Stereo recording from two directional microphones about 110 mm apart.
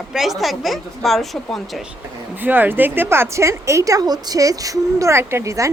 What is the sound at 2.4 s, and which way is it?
A woman's voice, 15° right (ahead or behind).